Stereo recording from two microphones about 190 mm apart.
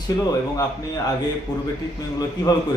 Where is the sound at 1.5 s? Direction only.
20° left (ahead or behind).